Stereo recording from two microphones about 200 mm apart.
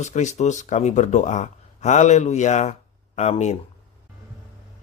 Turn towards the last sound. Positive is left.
turn(degrees=35)  # may be behind; listen again after turning